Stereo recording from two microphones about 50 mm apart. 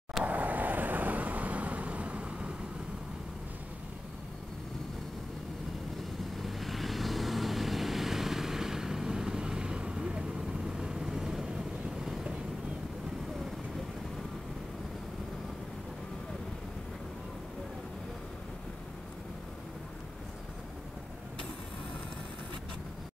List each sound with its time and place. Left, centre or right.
0.2 s vehicle: right
6.3 s vehicle: centre